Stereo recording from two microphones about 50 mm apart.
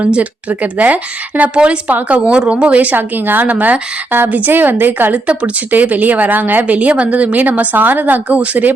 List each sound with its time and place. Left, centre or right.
0.0 s speech: right
2.3 s speech: right
5.1 s speech: right